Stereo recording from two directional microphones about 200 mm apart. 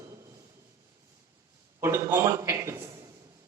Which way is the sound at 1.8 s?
15° right (ahead or behind).